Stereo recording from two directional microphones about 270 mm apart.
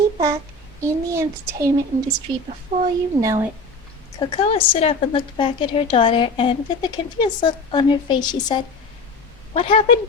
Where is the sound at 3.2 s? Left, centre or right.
Centre.